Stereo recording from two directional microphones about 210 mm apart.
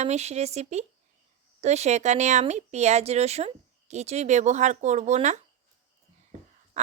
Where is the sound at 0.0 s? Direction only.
30° right (ahead or behind).